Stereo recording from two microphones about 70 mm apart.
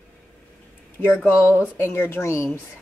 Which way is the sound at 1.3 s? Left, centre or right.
Left.